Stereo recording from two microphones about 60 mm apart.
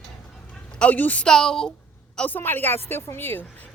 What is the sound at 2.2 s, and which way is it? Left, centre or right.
A woman's voice, left.